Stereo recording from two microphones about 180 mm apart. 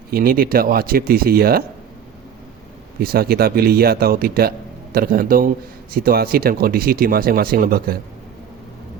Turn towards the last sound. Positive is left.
turn(degrees=-55)  # may be behind; listen again after turning